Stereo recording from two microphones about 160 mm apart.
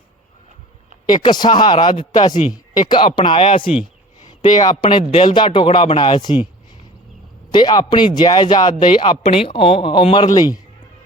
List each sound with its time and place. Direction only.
1.0 s a man's voice: 25° left (ahead or behind)
7.5 s a man's voice: 25° left (ahead or behind)